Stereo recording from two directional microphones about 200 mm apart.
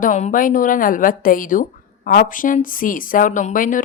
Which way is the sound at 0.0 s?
40° left (ahead or behind).